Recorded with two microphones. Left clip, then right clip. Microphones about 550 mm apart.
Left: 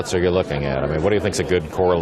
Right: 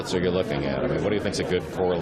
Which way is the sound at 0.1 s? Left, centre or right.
Left.